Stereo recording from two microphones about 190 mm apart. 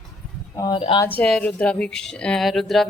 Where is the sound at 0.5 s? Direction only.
20° left (ahead or behind).